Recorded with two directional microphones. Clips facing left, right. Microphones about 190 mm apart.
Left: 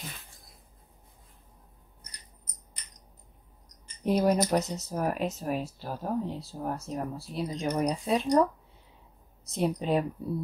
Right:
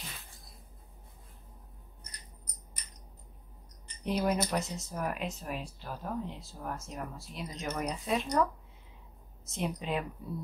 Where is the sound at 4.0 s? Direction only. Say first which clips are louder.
Left 6 dB; 40° left (ahead or behind).